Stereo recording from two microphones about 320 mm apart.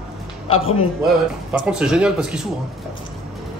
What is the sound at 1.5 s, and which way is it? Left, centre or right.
Speech, centre.